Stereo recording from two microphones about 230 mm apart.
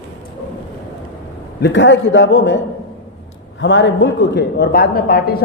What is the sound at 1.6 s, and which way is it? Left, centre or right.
Speech, left.